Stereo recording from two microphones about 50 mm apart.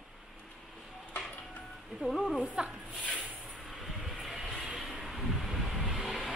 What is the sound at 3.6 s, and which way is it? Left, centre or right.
Vehicle, centre.